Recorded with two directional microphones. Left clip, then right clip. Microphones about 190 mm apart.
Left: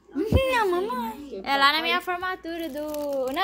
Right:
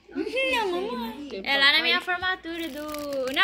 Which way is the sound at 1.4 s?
40° left (ahead or behind).